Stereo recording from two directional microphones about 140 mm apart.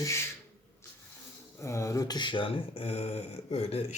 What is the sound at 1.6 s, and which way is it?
Speech, 20° left (ahead or behind).